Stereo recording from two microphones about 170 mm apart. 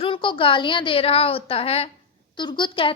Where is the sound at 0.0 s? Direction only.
30° left (ahead or behind).